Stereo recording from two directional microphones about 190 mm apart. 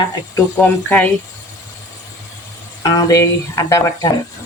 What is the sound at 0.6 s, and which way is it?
Speech, 5° left (ahead or behind).